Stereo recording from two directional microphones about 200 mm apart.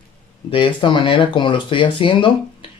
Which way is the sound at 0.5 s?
25° left (ahead or behind).